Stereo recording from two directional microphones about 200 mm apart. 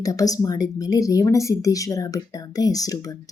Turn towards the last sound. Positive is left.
turn(degrees=20)  # may be behind; listen again after turning